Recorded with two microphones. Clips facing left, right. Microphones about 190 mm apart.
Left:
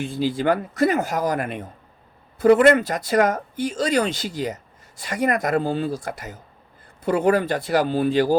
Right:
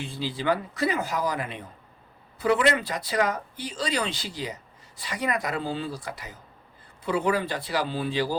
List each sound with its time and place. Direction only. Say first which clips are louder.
0.0 s speech: left 7 dB; 50° left (ahead or behind)